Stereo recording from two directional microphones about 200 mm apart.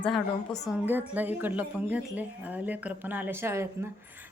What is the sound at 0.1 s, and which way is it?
Speech, centre (ahead or behind).